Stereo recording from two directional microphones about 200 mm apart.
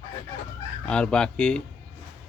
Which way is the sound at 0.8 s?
5° left (ahead or behind).